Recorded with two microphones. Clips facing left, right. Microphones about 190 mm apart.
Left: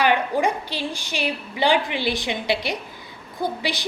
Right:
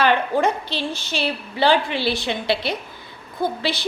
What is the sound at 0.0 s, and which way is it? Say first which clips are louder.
A woman's voice: right 2 dB; 15° left (ahead or behind).